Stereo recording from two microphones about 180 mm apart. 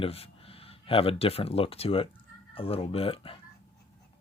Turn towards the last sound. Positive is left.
turn(degrees=30)  # may be behind; listen again after turning